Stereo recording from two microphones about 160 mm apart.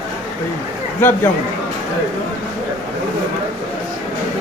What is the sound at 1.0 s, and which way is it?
Speech, 15° left (ahead or behind).